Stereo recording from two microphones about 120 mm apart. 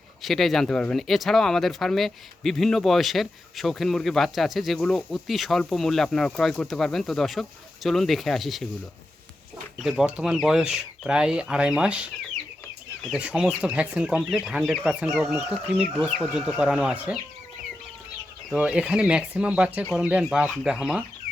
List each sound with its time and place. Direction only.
0.2 s speech: centre (ahead or behind)
9.7 s speech: centre (ahead or behind)
13.1 s speech: 10° right (ahead or behind)
15.2 s speech: 20° right (ahead or behind)
15.7 s speech: 5° right (ahead or behind)
18.5 s speech: 5° right (ahead or behind)